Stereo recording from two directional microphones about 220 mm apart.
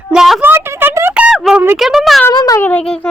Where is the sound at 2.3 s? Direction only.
15° left (ahead or behind).